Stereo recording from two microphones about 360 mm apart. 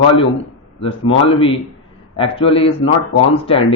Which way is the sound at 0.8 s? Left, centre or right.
Centre.